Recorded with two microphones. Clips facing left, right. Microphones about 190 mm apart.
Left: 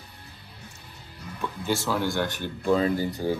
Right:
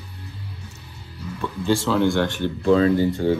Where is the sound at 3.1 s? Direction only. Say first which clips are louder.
Right 7 dB; centre (ahead or behind).